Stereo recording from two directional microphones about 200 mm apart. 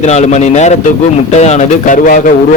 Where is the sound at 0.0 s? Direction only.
35° left (ahead or behind).